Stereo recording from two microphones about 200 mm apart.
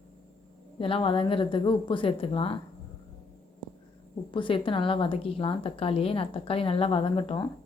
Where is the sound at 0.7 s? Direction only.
25° left (ahead or behind).